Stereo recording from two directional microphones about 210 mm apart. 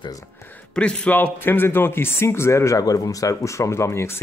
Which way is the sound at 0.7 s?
5° left (ahead or behind).